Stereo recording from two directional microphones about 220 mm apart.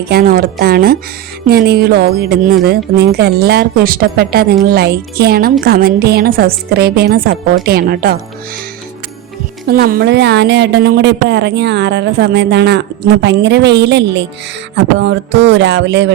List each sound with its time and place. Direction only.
0.1 s a woman's voice: 40° right (ahead or behind)
9.6 s a woman's voice: 45° right (ahead or behind)